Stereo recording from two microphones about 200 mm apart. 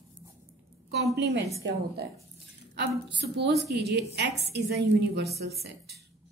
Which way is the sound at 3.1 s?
55° right (ahead or behind).